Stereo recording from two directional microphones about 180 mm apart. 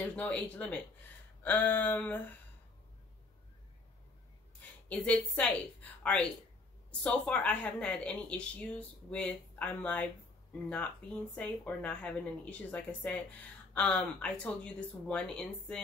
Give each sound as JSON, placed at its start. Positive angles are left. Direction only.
{"t": 0.0, "sound": "a woman's voice", "side_deg": 5}
{"t": 4.8, "sound": "a woman's voice", "side_deg": 5}
{"t": 7.0, "sound": "a woman's voice", "side_deg": 5}
{"t": 11.3, "sound": "a woman's voice", "side_deg": 5}